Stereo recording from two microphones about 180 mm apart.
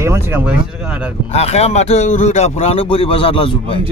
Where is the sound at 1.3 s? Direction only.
35° left (ahead or behind).